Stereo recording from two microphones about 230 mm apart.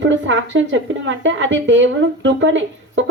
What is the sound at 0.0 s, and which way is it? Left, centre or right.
A woman's voice, right.